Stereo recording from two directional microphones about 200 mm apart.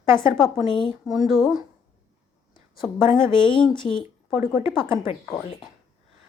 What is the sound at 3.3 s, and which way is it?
Speech, 25° left (ahead or behind).